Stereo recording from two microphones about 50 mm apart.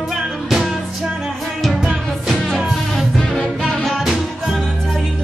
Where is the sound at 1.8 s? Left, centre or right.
Centre.